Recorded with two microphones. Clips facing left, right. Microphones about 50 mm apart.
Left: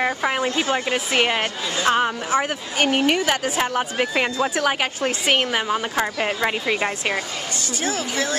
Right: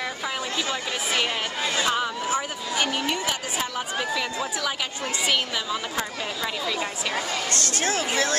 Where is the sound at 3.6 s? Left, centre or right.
Left.